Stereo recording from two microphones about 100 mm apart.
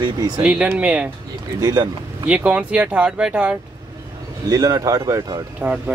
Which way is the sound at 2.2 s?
10° right (ahead or behind).